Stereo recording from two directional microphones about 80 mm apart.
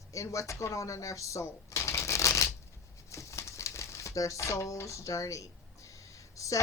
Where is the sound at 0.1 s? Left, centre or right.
Left.